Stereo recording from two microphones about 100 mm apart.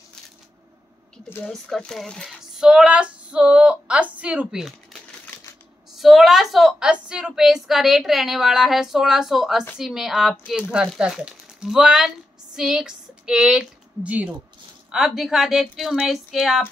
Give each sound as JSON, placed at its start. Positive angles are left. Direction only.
{"t": 1.5, "sound": "a woman's voice", "side_deg": 5}
{"t": 2.2, "sound": "speech", "side_deg": -5}
{"t": 5.2, "sound": "typewriter", "side_deg": 20}
{"t": 5.9, "sound": "a woman's voice", "side_deg": 0}